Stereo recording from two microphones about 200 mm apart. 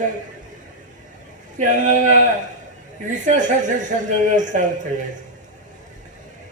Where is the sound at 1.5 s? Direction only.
40° right (ahead or behind).